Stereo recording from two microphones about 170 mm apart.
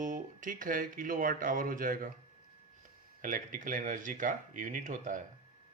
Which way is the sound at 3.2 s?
55° right (ahead or behind).